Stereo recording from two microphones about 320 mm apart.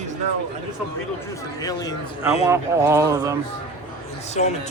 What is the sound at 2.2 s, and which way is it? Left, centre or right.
Speech, centre.